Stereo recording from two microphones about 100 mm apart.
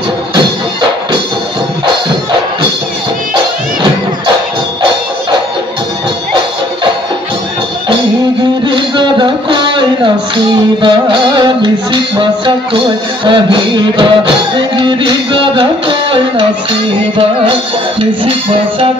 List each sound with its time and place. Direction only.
8.6 s music: 55° right (ahead or behind)
18.2 s music: 60° right (ahead or behind)